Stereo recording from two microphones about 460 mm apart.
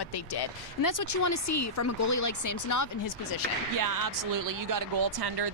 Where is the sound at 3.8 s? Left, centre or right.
Right.